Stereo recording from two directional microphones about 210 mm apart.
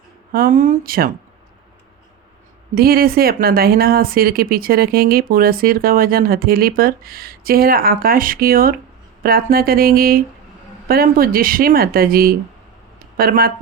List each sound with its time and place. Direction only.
0.3 s speech: 40° right (ahead or behind)
2.7 s speech: 45° right (ahead or behind)